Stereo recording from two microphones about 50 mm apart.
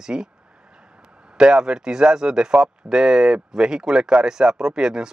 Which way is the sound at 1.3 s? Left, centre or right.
Centre.